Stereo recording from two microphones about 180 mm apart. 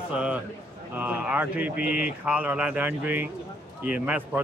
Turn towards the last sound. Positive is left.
turn(degrees=-10)  # may be behind; listen again after turning